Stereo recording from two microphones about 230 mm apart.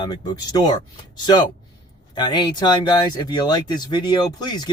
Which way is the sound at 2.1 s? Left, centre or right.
Centre.